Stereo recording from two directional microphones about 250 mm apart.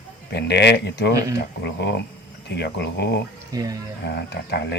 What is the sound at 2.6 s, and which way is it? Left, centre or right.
Speech, left.